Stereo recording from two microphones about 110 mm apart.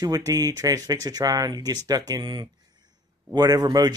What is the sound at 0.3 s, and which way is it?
Speech, 35° right (ahead or behind).